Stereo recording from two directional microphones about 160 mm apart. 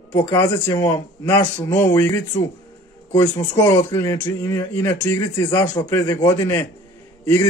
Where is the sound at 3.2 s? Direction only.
25° left (ahead or behind).